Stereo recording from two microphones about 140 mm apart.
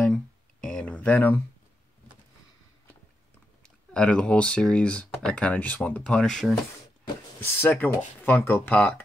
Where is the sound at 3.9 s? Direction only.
5° left (ahead or behind).